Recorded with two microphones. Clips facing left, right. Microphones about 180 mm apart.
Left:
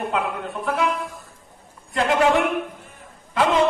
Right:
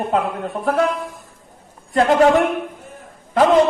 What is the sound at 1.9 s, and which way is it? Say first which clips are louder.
Speech: right 6 dB; 40° right (ahead or behind).